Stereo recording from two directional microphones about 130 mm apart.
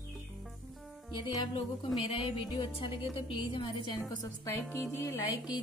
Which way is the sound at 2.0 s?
45° left (ahead or behind).